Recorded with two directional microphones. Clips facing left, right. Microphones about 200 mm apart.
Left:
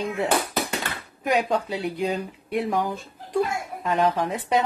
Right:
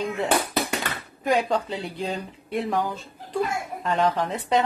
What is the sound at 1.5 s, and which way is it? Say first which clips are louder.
Speech: left 1 dB; 10° left (ahead or behind).